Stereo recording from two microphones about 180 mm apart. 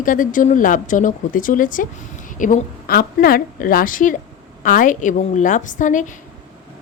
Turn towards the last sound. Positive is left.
turn(degrees=45)  # may be behind; listen again after turning